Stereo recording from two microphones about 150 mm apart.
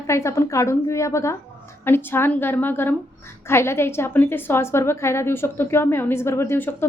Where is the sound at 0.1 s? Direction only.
20° left (ahead or behind).